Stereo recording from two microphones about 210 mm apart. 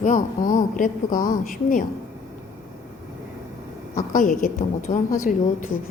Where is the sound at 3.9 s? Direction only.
40° left (ahead or behind).